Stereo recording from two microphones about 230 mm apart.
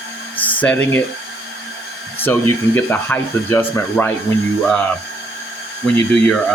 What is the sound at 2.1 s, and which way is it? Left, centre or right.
Speech, centre.